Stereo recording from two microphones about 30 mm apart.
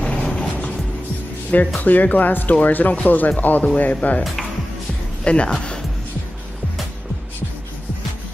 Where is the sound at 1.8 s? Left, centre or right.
Left.